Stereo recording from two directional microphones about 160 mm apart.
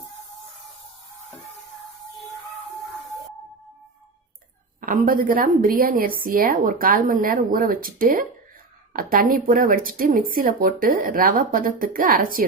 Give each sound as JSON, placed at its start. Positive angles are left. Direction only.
{"t": 4.8, "sound": "speech", "side_deg": -60}